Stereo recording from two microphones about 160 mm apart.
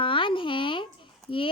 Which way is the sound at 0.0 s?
30° left (ahead or behind).